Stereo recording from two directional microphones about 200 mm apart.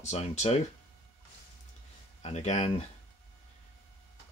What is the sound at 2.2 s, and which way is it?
Speech, 35° left (ahead or behind).